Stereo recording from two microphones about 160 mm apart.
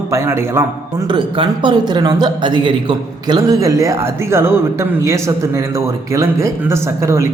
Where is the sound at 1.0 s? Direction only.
30° right (ahead or behind).